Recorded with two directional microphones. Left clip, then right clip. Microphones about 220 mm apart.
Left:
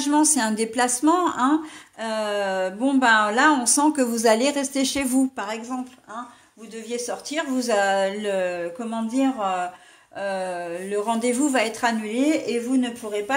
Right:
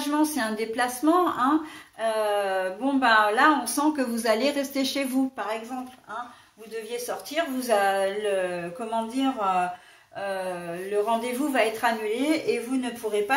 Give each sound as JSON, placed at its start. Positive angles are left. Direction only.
{"t": 0.1, "sound": "a woman's voice", "side_deg": 50}
{"t": 6.9, "sound": "a woman's voice", "side_deg": 45}